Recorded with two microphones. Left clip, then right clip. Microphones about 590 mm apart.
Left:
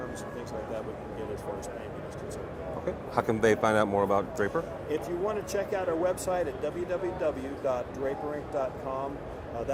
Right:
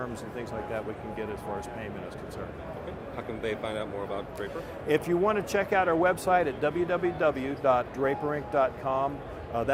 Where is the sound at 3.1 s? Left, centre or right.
Left.